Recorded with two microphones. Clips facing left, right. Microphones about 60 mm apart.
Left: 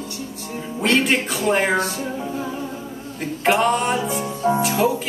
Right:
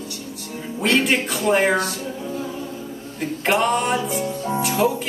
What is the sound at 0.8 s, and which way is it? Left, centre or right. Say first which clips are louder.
Speech: even; centre.